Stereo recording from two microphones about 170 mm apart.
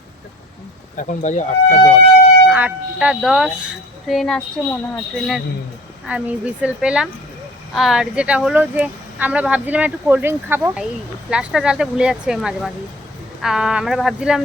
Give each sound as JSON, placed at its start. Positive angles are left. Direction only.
{"t": 0.9, "sound": "speech", "side_deg": 45}
{"t": 2.5, "sound": "speech", "side_deg": -10}
{"t": 6.1, "sound": "speech", "side_deg": -5}